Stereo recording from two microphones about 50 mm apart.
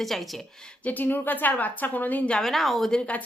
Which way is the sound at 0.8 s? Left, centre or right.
Left.